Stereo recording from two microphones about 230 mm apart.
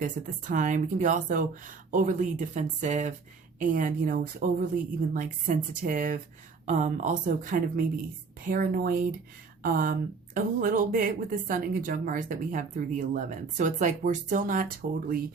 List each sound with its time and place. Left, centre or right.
0.0 s speech: right